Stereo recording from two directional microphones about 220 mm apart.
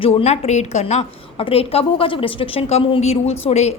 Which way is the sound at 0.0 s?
25° left (ahead or behind).